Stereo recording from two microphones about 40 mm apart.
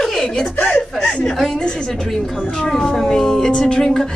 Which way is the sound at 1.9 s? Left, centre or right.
Centre.